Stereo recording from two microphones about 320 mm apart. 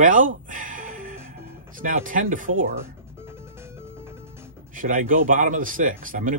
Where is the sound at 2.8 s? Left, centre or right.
Centre.